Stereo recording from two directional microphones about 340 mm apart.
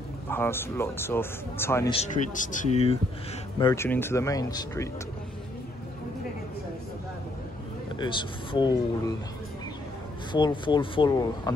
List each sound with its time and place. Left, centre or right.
0.3 s a man's voice: centre
2.0 s a man's voice: left
8.0 s a man's voice: centre
10.3 s a man's voice: centre